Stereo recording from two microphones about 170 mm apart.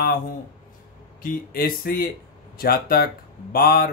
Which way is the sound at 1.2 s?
60° left (ahead or behind).